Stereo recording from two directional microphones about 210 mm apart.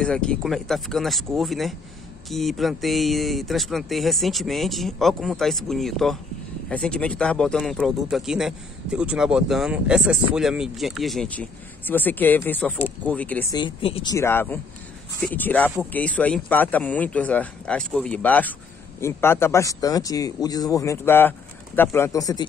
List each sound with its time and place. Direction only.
0.0 s speech: 5° left (ahead or behind)
13.6 s speech: 25° left (ahead or behind)
14.1 s speech: 10° left (ahead or behind)